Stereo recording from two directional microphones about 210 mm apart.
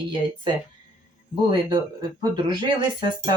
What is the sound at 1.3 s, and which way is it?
Speech, 20° right (ahead or behind).